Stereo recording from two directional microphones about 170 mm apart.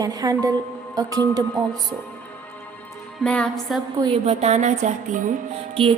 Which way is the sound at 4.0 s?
35° right (ahead or behind).